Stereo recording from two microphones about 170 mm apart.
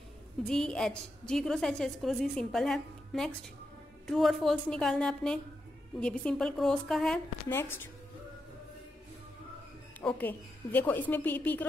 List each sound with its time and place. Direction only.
0.5 s a woman's voice: 5° left (ahead or behind)
9.9 s a woman's voice: 10° left (ahead or behind)